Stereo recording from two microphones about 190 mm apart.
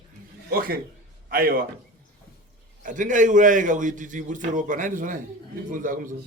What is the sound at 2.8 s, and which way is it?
A man's voice, 40° right (ahead or behind).